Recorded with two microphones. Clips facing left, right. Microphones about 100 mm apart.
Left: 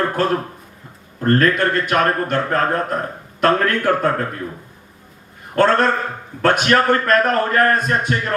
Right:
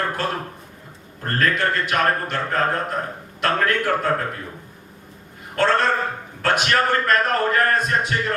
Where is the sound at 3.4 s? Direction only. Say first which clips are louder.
Left 4 dB; 45° left (ahead or behind).